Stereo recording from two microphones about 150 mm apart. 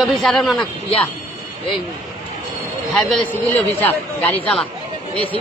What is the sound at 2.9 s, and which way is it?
A man's voice, 5° left (ahead or behind).